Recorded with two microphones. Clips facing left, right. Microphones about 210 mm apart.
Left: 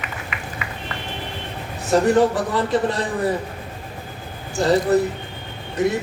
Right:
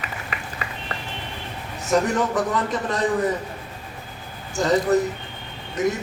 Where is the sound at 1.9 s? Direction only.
35° left (ahead or behind).